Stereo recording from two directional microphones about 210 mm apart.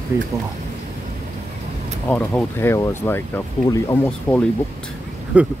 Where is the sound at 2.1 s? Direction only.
10° left (ahead or behind).